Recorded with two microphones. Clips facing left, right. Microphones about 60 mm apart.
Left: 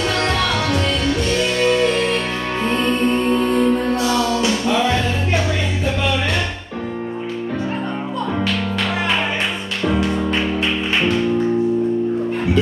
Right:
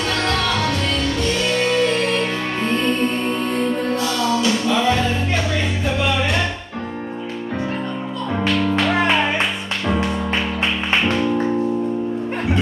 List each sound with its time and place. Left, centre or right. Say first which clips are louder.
1.6 s music: left 3 dB; centre
2.8 s music: left 4 dB; centre
3.3 s music: left 4 dB; centre